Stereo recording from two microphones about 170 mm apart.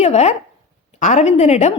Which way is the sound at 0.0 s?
40° left (ahead or behind).